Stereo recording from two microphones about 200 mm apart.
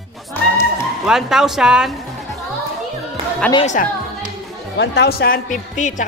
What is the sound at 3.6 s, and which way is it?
Speech, 35° left (ahead or behind).